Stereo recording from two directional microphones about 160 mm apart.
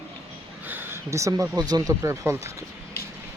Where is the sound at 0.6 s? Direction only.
10° right (ahead or behind).